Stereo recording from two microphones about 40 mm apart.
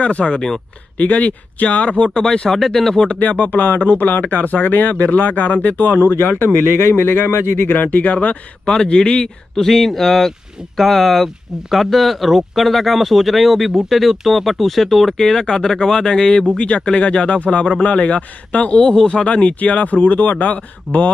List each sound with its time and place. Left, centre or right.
0.0 s a man's voice: left
2.1 s a man's voice: left
2.5 s speech: centre
3.2 s speech: left
6.1 s speech: left
7.7 s speech: left
8.6 s a man's voice: left
9.6 s a man's voice: centre; by 18.9 s left
19.2 s a man's voice: left